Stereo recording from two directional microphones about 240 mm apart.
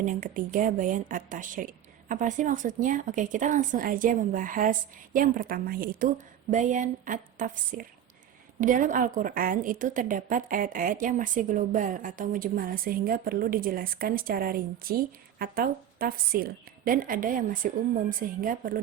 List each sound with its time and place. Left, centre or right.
0.0 s a woman's voice: right